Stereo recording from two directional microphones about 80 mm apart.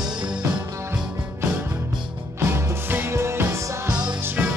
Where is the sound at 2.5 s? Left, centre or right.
Right.